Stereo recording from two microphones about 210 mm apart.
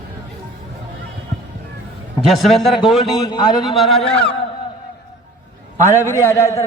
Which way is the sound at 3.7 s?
Centre (ahead or behind).